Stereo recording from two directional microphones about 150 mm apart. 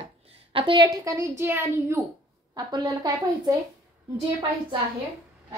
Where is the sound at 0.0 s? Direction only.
35° right (ahead or behind).